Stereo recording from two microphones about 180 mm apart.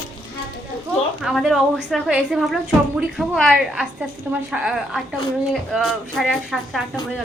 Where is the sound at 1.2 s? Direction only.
Centre (ahead or behind).